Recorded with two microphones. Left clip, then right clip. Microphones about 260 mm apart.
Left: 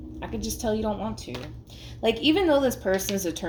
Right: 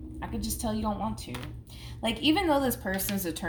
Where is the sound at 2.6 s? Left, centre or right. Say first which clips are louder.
Left 5 dB; right.